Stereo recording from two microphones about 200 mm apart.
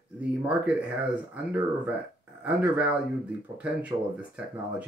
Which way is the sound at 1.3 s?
5° right (ahead or behind).